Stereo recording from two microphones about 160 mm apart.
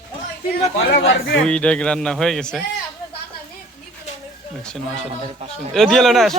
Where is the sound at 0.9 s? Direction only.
70° left (ahead or behind).